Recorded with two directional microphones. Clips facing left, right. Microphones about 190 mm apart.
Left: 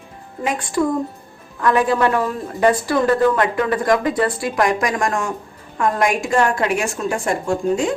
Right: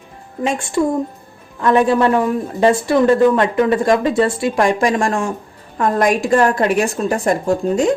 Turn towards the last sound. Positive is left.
turn(degrees=-40)  # may be behind; listen again after turning